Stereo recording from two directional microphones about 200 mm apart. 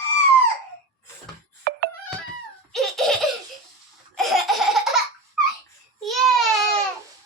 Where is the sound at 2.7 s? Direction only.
Centre (ahead or behind).